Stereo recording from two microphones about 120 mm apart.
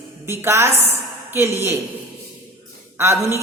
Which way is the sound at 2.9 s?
25° right (ahead or behind).